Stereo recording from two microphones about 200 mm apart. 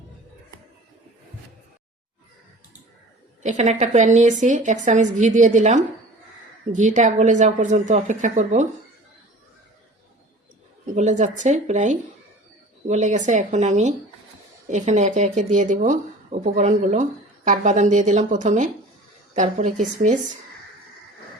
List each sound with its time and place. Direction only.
3.4 s speech: 35° right (ahead or behind)
10.9 s a woman's voice: 35° right (ahead or behind)